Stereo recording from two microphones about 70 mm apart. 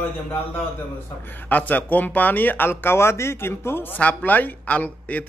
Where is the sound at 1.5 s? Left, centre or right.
Left.